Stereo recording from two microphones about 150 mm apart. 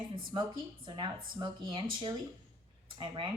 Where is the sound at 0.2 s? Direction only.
30° right (ahead or behind).